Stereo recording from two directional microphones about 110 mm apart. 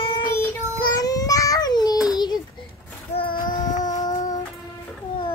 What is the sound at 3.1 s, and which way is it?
Child singing, 55° left (ahead or behind).